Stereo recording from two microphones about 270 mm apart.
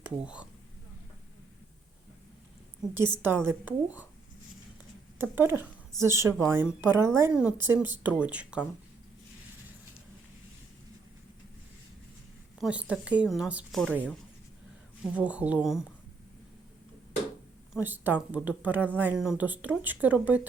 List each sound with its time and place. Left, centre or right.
0.0 s speech: centre
3.2 s speech: centre
5.1 s a woman's voice: centre
12.5 s a woman's voice: centre
17.7 s a woman's voice: centre